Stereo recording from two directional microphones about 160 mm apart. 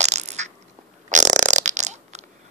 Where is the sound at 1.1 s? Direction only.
50° right (ahead or behind).